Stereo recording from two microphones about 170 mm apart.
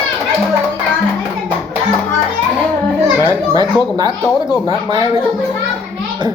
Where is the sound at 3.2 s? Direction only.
20° right (ahead or behind).